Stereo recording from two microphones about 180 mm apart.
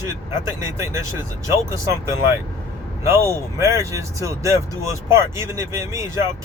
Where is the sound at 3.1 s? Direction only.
15° right (ahead or behind).